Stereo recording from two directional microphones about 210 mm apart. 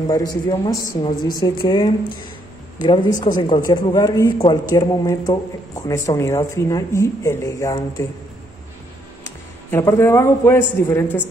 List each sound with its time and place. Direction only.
0.1 s a woman's voice: 15° left (ahead or behind)
3.1 s speech: 40° left (ahead or behind)
3.3 s speech: 20° left (ahead or behind)
9.2 s a man's voice: 10° left (ahead or behind)